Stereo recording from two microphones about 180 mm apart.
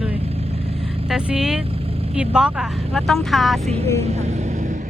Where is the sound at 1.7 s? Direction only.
35° right (ahead or behind).